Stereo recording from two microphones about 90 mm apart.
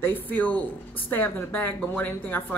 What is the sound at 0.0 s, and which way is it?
A woman's voice, 20° left (ahead or behind).